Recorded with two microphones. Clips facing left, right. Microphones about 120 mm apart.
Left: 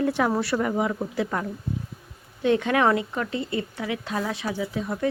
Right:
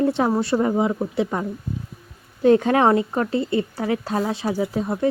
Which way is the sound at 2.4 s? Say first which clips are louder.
Right 5 dB; 40° right (ahead or behind).